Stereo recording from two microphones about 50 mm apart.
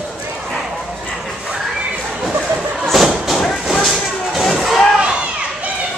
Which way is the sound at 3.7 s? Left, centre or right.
Centre.